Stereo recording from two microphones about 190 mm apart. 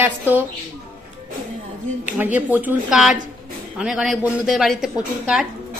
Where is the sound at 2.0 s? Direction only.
10° right (ahead or behind).